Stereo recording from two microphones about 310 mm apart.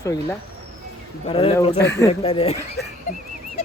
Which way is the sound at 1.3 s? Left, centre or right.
Centre.